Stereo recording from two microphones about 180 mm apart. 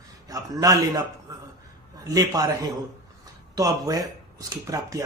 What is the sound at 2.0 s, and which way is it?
Speech, 20° right (ahead or behind).